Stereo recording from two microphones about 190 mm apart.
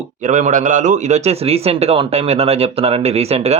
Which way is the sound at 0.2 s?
40° right (ahead or behind).